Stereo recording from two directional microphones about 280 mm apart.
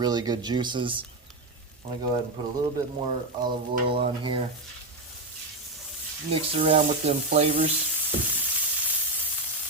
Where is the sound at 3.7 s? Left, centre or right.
Centre.